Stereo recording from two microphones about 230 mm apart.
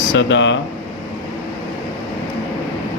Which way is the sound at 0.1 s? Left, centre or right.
Left.